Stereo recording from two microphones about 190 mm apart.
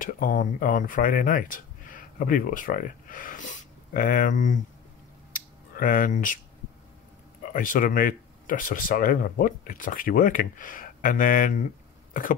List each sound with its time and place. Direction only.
0.0 s speech: 45° left (ahead or behind)
5.3 s a sound: 45° left (ahead or behind)
7.5 s speech: 45° left (ahead or behind)
12.1 s cough: 45° left (ahead or behind)